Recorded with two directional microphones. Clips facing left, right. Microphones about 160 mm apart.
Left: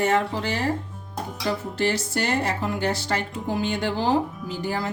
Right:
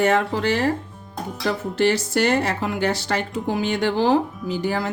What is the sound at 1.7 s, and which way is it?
Speech, 75° right (ahead or behind).